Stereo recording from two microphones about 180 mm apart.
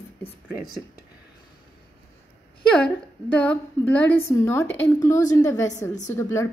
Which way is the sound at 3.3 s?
10° left (ahead or behind).